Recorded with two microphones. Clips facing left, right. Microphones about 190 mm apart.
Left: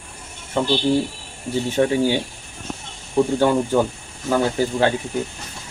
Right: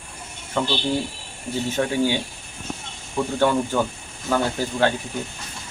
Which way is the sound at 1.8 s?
20° left (ahead or behind).